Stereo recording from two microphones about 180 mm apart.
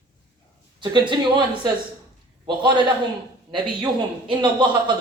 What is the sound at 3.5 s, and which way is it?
A man's voice, 25° right (ahead or behind).